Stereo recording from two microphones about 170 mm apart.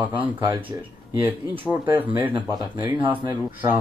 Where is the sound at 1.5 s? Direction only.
10° right (ahead or behind).